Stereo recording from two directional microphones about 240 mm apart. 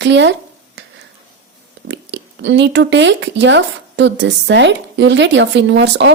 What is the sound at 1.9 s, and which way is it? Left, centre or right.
Speech, right.